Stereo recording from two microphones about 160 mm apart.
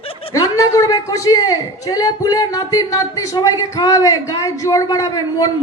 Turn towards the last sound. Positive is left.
turn(degrees=25)  # may be behind; listen again after turning